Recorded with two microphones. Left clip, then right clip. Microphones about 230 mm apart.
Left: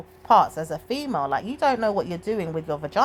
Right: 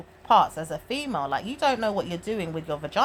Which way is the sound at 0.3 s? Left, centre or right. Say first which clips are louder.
Left 2 dB; left.